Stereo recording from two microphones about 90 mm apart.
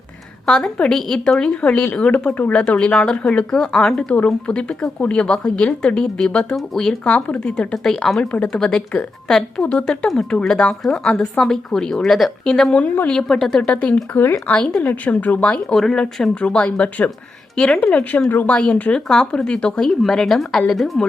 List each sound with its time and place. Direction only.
0.4 s speech: 10° left (ahead or behind)
18.3 s speech: 20° left (ahead or behind); by 21.0 s centre (ahead or behind)